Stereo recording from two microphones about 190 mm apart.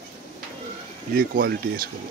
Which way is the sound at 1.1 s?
50° right (ahead or behind).